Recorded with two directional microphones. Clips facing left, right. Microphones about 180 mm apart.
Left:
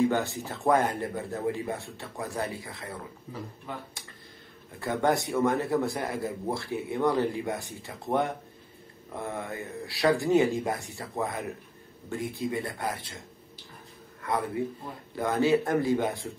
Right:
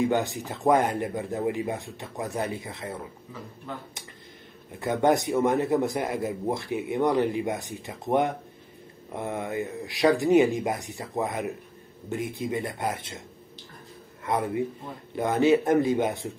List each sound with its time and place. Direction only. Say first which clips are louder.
0.0 s speech: right 1 dB; 20° right (ahead or behind)
4.7 s a man's voice: right 4 dB; 20° right (ahead or behind)
14.2 s a man's voice: right 3 dB; 20° right (ahead or behind)